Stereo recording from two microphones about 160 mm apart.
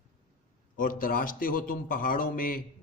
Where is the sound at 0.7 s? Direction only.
60° left (ahead or behind).